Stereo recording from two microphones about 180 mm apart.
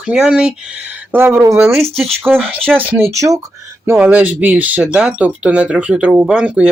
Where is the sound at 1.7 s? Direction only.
Centre (ahead or behind).